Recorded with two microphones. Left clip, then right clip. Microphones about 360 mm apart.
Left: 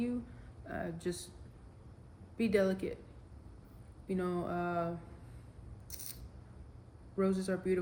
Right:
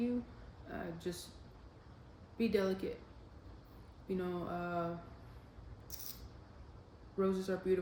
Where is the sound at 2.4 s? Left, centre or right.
Left.